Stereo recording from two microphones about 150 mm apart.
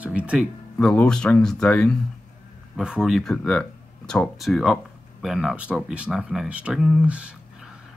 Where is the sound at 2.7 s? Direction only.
5° right (ahead or behind).